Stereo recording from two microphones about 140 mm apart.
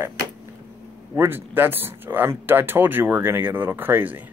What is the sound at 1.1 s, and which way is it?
Speech, 15° right (ahead or behind).